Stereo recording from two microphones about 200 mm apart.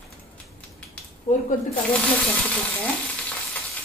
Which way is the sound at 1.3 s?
30° left (ahead or behind).